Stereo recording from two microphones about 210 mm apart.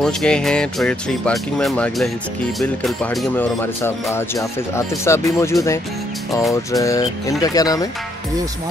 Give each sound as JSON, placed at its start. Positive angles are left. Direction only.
{"t": 0.0, "sound": "speech", "side_deg": 5}